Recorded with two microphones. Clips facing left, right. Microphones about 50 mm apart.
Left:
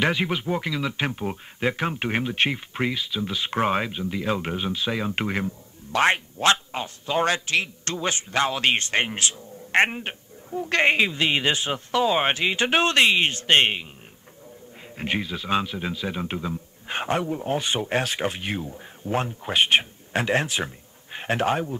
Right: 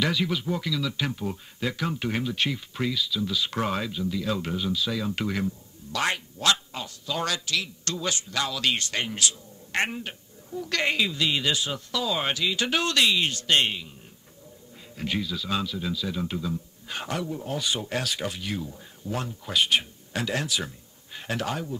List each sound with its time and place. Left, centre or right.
0.0 s speech: left
15.0 s speech: left